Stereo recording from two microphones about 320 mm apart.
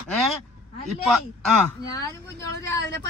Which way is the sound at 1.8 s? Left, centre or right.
Centre.